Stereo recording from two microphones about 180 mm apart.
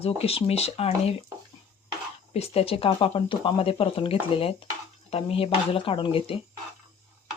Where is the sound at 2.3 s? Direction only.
35° left (ahead or behind).